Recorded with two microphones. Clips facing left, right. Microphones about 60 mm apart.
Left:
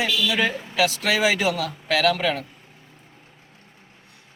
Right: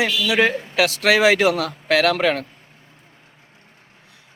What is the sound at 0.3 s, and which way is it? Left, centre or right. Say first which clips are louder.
A woman's voice: right 5 dB; right.